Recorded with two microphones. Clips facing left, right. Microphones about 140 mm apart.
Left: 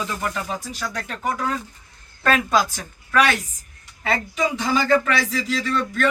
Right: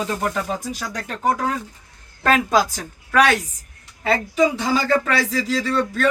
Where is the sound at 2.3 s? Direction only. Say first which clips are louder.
Right 2 dB; 40° right (ahead or behind).